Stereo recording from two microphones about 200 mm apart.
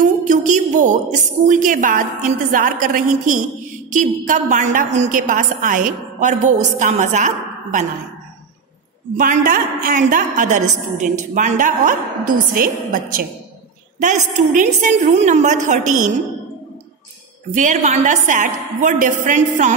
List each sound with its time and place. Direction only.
0.0 s a sound: 40° right (ahead or behind)
1.4 s a woman's voice: 40° right (ahead or behind)
9.1 s a woman's voice: 40° right (ahead or behind)
17.6 s a woman's voice: 35° right (ahead or behind)